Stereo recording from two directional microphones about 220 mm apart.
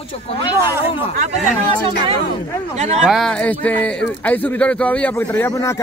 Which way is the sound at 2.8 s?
30° right (ahead or behind).